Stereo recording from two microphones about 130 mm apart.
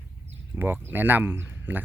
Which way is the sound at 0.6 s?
15° right (ahead or behind).